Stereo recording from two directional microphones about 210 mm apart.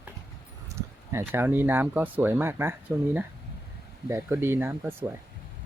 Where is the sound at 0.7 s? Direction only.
10° right (ahead or behind).